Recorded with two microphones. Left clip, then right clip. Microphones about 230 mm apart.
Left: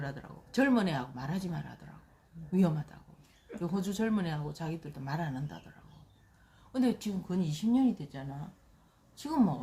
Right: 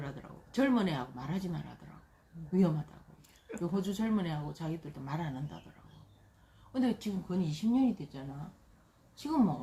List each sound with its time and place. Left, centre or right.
0.0 s speech: left
3.6 s speech: left
6.7 s speech: left